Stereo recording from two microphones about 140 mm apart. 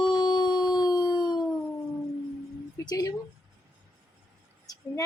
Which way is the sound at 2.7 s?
25° left (ahead or behind).